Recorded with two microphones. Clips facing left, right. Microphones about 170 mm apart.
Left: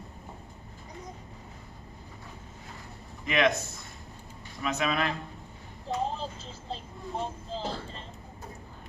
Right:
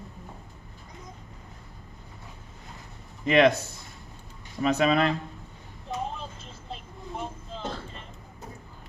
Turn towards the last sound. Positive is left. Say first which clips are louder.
# left 1 dB
turn(degrees=30)  # may be behind; listen again after turning